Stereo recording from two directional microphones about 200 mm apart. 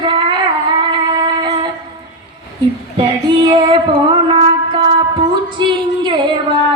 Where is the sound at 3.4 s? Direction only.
20° right (ahead or behind).